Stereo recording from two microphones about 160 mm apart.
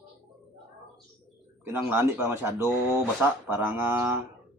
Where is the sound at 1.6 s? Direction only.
10° right (ahead or behind).